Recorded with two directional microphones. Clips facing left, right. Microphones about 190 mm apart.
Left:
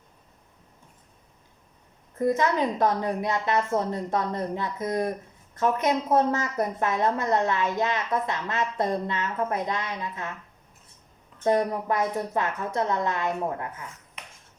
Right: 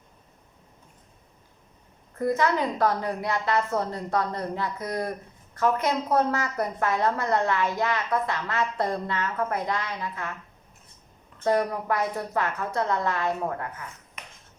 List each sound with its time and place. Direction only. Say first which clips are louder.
2.1 s a woman's voice: left 1 dB; 20° left (ahead or behind)
11.4 s a woman's voice: left 1 dB; 20° left (ahead or behind)